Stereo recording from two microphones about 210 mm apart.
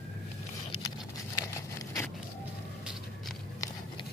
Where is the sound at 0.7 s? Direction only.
15° left (ahead or behind).